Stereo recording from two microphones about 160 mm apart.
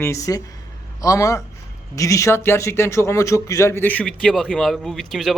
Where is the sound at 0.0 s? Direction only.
20° left (ahead or behind).